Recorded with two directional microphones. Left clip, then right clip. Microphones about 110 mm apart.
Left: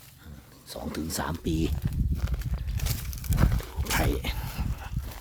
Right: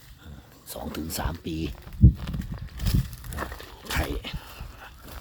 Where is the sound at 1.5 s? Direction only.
40° left (ahead or behind).